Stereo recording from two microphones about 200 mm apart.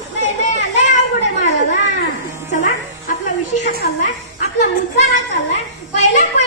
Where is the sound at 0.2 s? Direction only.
35° left (ahead or behind).